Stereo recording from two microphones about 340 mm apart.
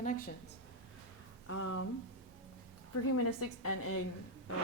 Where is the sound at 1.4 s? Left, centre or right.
Left.